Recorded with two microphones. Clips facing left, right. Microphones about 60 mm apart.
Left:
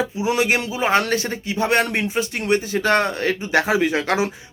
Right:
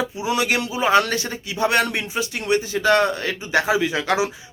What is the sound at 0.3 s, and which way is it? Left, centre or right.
A man's voice, left.